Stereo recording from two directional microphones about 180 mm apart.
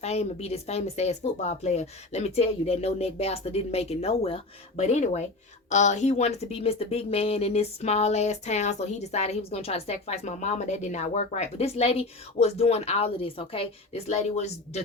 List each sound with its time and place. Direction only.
0.0 s speech: 35° left (ahead or behind)